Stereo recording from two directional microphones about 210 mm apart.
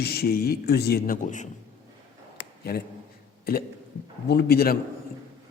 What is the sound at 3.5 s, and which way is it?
Speech, 45° left (ahead or behind).